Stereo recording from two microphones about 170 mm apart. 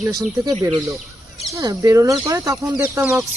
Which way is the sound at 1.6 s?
20° right (ahead or behind).